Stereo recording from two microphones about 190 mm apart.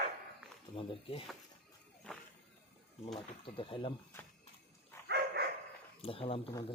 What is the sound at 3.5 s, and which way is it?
Speech, 25° left (ahead or behind).